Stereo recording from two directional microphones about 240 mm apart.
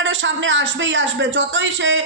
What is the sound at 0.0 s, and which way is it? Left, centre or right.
A man's voice, right.